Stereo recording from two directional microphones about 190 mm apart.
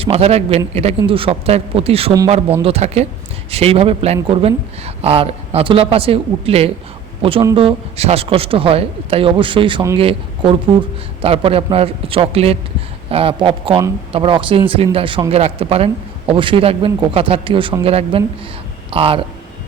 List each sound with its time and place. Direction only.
0.0 s speech: 30° right (ahead or behind)